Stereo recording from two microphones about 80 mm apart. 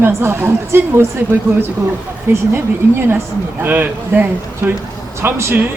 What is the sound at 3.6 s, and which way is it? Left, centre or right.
Speech, right.